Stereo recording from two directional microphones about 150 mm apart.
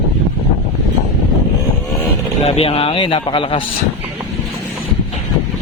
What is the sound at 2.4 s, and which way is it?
Speech, 40° left (ahead or behind).